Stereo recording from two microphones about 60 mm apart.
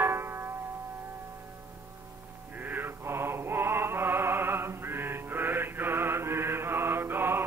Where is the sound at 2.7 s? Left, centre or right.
Right.